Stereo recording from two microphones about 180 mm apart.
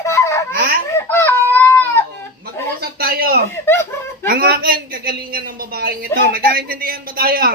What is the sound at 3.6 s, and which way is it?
Laughter, 15° left (ahead or behind).